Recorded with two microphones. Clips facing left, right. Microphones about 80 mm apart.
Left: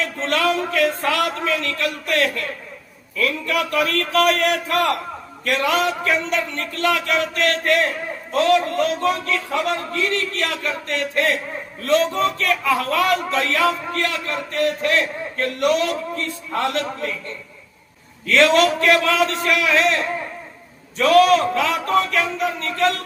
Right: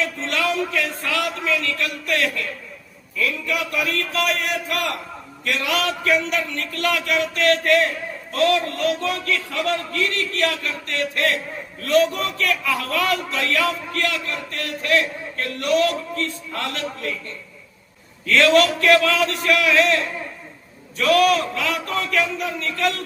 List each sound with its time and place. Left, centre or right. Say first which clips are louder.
0.0 s a man's voice: left 3 dB; left
5.5 s a man's voice: left 4 dB; left
5.8 s a man's voice: even; left
18.3 s a man's voice: left 1 dB; left